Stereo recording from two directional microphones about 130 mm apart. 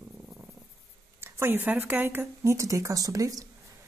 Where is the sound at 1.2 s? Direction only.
15° right (ahead or behind).